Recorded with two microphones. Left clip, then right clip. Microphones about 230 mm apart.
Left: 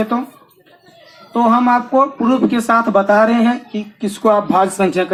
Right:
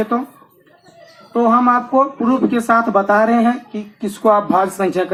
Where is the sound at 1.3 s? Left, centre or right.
Left.